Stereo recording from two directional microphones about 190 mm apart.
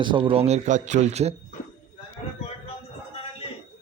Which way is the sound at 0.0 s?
25° right (ahead or behind).